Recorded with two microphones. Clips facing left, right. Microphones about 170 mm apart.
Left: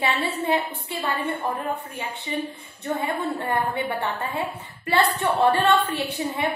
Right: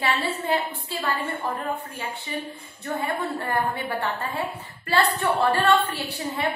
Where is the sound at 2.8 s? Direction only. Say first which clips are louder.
Left 2 dB; 25° left (ahead or behind).